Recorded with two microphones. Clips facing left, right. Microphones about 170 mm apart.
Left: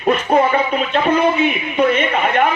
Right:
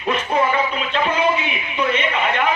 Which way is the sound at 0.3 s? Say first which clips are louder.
Left 5 dB; 55° left (ahead or behind).